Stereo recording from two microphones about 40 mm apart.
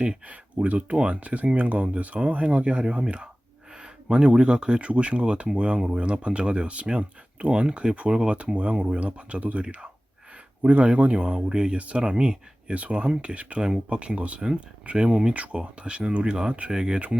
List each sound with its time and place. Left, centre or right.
0.3 s speech: right
8.4 s speech: right
15.3 s speech: right